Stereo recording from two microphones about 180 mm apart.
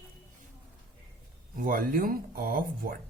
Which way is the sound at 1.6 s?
50° right (ahead or behind).